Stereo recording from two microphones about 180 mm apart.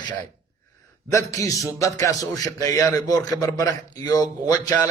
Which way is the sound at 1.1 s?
20° left (ahead or behind).